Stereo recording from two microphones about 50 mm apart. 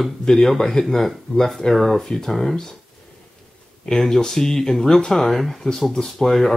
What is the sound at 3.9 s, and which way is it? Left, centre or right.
Speech, centre.